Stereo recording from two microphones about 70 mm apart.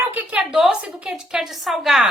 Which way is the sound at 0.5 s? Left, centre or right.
Centre.